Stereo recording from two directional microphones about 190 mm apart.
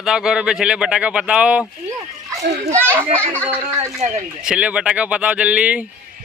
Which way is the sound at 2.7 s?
10° right (ahead or behind).